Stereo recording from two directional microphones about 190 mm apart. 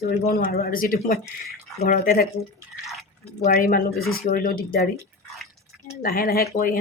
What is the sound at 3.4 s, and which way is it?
Speech, 50° left (ahead or behind).